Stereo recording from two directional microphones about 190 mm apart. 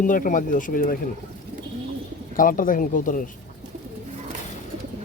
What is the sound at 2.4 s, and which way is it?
Speech, 45° left (ahead or behind).